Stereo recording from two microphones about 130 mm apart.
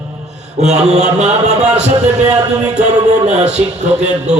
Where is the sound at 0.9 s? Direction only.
60° right (ahead or behind).